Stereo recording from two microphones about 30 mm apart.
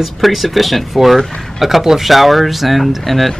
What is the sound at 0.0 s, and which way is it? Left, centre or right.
Speech, centre.